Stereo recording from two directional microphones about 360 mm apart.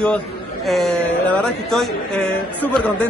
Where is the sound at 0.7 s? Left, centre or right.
Centre.